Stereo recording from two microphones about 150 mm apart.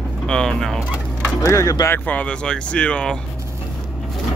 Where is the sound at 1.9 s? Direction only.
10° left (ahead or behind).